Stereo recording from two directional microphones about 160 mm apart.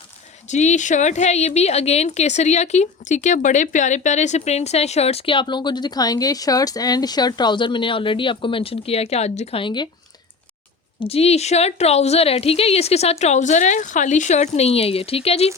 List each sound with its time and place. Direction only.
0.5 s a woman's voice: 45° left (ahead or behind); by 9.9 s 30° left (ahead or behind)
11.0 s a woman's voice: 40° left (ahead or behind)